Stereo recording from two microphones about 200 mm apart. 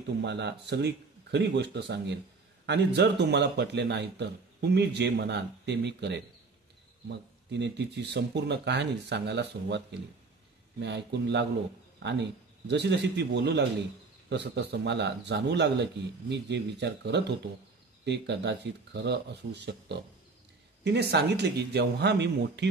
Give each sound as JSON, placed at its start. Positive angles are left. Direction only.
{"t": 0.2, "sound": "a man's voice", "side_deg": -60}